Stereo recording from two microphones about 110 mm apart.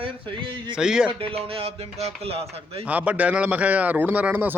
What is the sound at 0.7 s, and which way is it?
Speech, 5° right (ahead or behind).